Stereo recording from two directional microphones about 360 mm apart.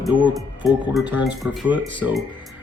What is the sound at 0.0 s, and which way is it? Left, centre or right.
Speech, centre.